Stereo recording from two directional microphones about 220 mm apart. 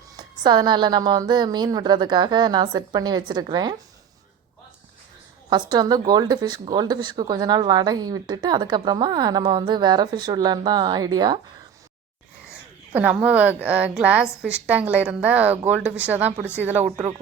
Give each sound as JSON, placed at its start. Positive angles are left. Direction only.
{"t": 0.2, "sound": "speech", "side_deg": -20}
{"t": 5.5, "sound": "speech", "side_deg": -20}
{"t": 12.9, "sound": "a woman's voice", "side_deg": -5}